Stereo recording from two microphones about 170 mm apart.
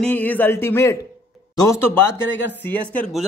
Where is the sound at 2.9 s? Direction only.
5° left (ahead or behind).